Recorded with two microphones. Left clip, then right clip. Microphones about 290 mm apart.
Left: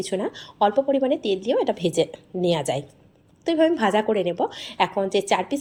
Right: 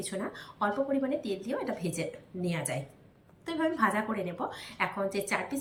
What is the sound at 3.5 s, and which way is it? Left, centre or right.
Speech, left.